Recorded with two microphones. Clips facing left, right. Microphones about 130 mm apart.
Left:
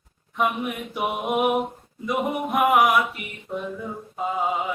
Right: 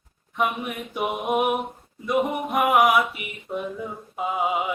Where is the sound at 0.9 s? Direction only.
Centre (ahead or behind).